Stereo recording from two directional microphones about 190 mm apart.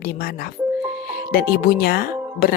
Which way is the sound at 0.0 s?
55° left (ahead or behind).